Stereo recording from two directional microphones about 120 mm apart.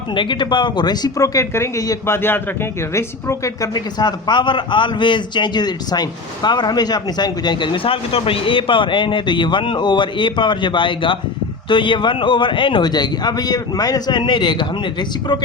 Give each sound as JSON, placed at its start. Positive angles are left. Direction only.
{"t": 0.1, "sound": "speech", "side_deg": 40}